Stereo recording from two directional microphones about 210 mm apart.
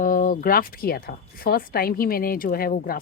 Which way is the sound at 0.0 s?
40° left (ahead or behind).